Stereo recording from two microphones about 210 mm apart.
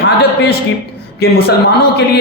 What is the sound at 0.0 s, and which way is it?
A man's voice, 50° left (ahead or behind).